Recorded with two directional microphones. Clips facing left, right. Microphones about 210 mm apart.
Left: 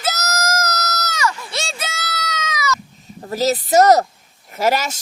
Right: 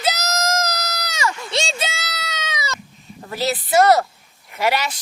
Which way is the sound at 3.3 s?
40° left (ahead or behind).